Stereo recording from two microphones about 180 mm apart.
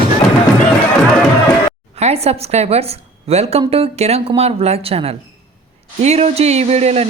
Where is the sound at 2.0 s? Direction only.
35° right (ahead or behind).